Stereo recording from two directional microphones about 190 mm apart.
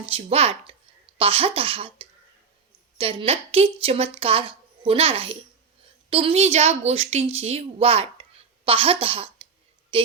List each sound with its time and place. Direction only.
0.0 s a woman's voice: 30° right (ahead or behind)